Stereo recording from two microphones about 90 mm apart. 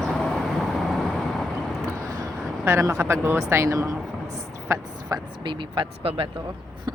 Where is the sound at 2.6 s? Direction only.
30° right (ahead or behind).